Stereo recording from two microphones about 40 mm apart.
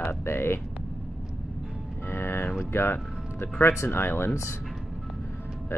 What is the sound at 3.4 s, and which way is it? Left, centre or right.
Speech, left.